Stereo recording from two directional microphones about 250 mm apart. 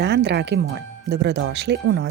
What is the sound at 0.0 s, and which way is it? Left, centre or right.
Speech, right.